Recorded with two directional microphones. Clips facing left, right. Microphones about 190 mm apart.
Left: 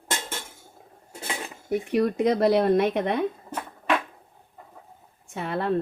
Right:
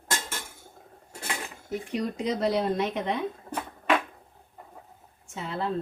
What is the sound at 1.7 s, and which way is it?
A woman's voice, 60° left (ahead or behind).